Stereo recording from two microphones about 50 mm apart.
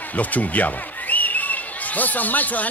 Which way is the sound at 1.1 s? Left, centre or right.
Left.